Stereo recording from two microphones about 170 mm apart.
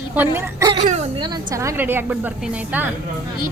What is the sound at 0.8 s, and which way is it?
Speech, 45° right (ahead or behind).